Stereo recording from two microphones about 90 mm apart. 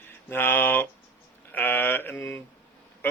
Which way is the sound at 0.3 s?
25° left (ahead or behind).